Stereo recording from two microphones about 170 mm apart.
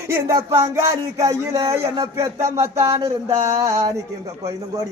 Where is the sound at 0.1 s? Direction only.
15° right (ahead or behind).